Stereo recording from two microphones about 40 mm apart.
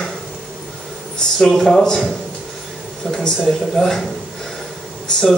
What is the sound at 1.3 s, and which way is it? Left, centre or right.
Speech, centre.